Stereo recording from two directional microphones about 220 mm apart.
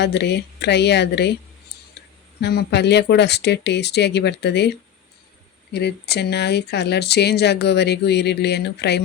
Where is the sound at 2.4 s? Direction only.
50° left (ahead or behind).